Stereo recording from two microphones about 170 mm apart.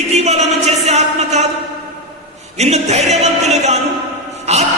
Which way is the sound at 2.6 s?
40° right (ahead or behind).